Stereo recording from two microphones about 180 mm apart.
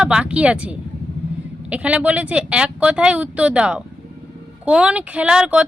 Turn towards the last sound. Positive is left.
turn(degrees=-5)  # may be behind; listen again after turning